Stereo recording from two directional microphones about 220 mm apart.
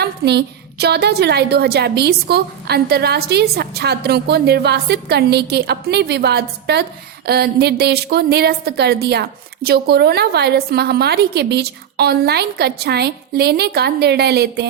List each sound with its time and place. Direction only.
0.0 s a woman's voice: 50° right (ahead or behind)